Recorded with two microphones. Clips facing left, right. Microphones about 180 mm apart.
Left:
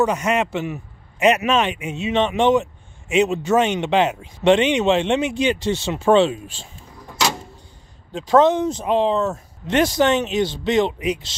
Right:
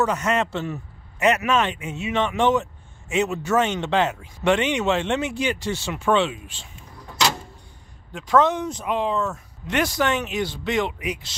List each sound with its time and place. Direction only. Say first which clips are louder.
0.0 s a man's voice: left 3 dB; 15° left (ahead or behind); by 6.7 s 35° left (ahead or behind)
8.1 s speech: left 4 dB; 25° left (ahead or behind)